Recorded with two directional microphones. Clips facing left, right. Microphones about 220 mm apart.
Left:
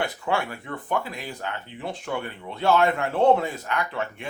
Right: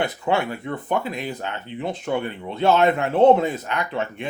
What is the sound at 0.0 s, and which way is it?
Speech, 20° right (ahead or behind).